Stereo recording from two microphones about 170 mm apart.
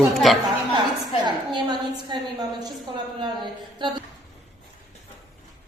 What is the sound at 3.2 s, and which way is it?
Speech, 25° right (ahead or behind).